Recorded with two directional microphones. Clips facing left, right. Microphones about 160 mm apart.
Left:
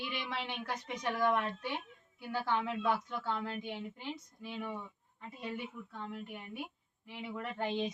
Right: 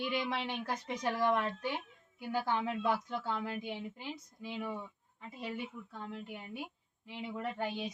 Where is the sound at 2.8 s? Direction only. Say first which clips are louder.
Even; 15° right (ahead or behind).